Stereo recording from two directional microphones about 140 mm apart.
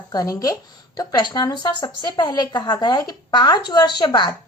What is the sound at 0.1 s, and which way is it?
A woman's voice, 25° left (ahead or behind).